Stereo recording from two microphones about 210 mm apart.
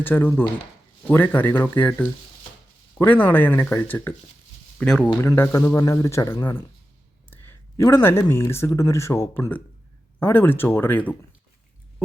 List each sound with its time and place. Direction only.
0.0 s a man's voice: 10° left (ahead or behind)